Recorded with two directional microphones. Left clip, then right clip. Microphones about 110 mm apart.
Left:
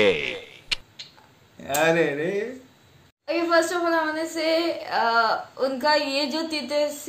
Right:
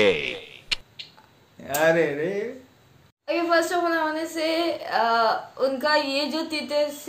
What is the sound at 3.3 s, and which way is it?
A woman's voice, 15° right (ahead or behind).